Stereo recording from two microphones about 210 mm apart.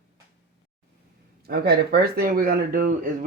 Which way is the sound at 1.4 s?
50° right (ahead or behind).